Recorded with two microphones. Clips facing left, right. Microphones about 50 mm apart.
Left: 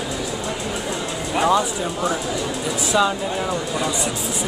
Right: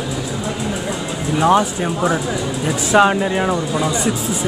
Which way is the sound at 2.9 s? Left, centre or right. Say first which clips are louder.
Right 7 dB; right.